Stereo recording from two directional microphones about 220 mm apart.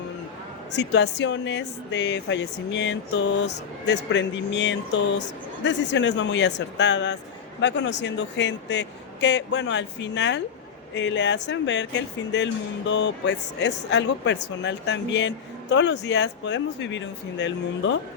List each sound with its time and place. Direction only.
0.8 s speech: 50° left (ahead or behind)